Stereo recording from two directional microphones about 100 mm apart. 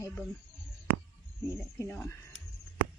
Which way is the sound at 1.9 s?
25° left (ahead or behind).